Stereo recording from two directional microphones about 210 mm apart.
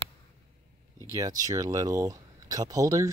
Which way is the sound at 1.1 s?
15° right (ahead or behind).